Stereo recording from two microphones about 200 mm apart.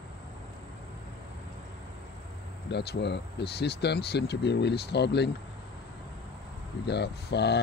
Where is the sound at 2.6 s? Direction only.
55° left (ahead or behind).